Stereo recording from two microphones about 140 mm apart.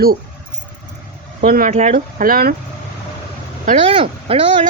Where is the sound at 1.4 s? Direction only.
80° right.